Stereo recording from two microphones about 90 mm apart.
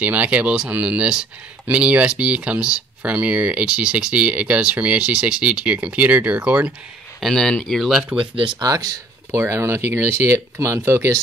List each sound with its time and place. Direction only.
0.0 s speech: 15° right (ahead or behind)
7.2 s speech: centre (ahead or behind)
8.2 s speech: 70° right (ahead or behind)
8.5 s speech: 45° right (ahead or behind)
9.4 s speech: 30° right (ahead or behind)